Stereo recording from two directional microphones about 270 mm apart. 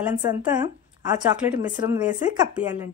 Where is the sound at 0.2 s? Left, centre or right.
Centre.